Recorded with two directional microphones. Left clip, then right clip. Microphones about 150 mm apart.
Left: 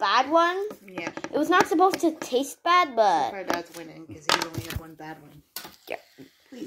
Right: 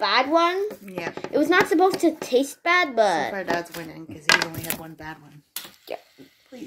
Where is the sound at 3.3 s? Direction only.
40° right (ahead or behind).